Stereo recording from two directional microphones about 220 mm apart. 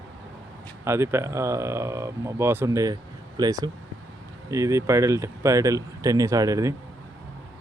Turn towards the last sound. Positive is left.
turn(degrees=-15)  # may be behind; listen again after turning